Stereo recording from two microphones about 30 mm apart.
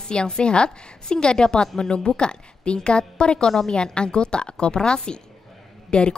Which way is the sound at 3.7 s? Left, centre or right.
Left.